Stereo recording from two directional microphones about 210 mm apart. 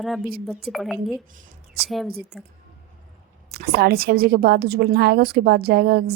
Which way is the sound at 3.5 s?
45° right (ahead or behind).